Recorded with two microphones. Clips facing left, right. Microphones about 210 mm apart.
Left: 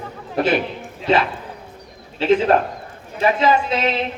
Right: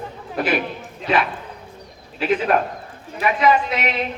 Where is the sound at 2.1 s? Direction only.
25° left (ahead or behind).